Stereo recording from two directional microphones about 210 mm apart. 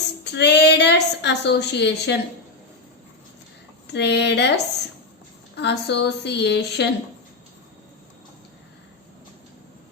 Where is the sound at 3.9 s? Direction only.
55° left (ahead or behind).